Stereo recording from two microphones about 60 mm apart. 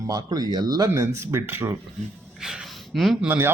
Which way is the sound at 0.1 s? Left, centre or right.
Right.